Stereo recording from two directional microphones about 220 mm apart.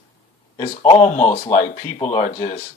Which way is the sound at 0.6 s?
30° left (ahead or behind).